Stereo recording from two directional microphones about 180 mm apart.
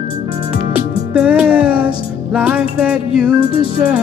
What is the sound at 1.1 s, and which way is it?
Music, 5° right (ahead or behind).